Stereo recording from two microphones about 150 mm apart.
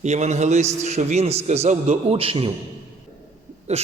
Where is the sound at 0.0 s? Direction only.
50° right (ahead or behind).